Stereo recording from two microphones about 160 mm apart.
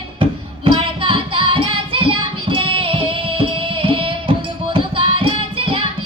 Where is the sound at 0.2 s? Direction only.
35° right (ahead or behind).